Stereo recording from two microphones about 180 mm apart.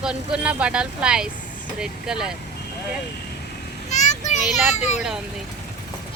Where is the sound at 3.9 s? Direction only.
40° left (ahead or behind).